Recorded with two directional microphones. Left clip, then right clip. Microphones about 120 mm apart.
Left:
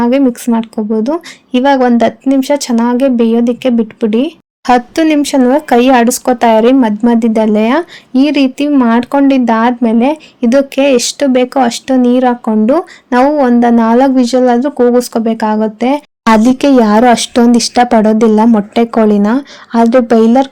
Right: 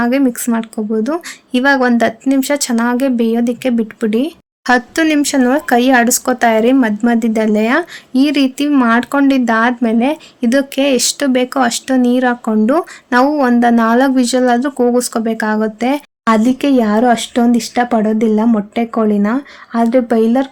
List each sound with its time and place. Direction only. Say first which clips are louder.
0.0 s a woman's voice: left 4 dB; 35° left (ahead or behind)